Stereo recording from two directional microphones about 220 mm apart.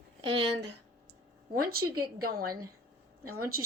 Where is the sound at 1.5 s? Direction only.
40° right (ahead or behind).